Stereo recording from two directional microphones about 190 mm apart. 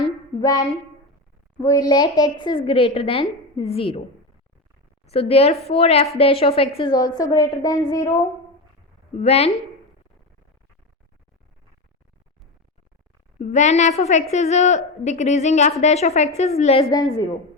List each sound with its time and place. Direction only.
0.3 s a woman's voice: 20° left (ahead or behind)
5.1 s a woman's voice: 30° left (ahead or behind)
9.1 s a woman's voice: 35° left (ahead or behind)
13.4 s a woman's voice: 40° left (ahead or behind)
16.8 s a woman's voice: 20° left (ahead or behind)